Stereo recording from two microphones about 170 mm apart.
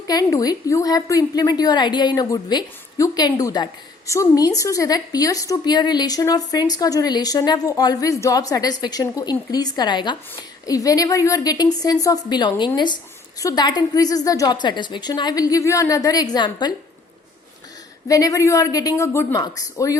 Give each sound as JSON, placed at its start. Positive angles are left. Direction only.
{"t": 0.1, "sound": "a woman's voice", "side_deg": 20}
{"t": 18.1, "sound": "a woman's voice", "side_deg": 20}